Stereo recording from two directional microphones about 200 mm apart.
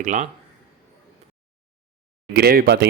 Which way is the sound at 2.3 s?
50° right (ahead or behind).